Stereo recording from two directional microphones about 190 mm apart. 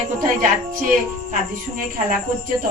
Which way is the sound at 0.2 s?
45° right (ahead or behind).